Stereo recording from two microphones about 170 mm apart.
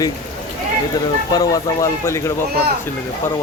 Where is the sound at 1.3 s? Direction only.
20° left (ahead or behind).